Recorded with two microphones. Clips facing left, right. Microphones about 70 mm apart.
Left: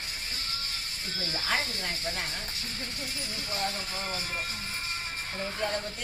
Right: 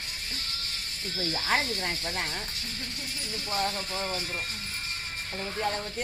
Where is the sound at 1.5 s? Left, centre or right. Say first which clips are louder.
Right 3 dB; right.